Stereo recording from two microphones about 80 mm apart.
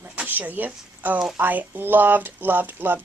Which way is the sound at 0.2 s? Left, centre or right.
Right.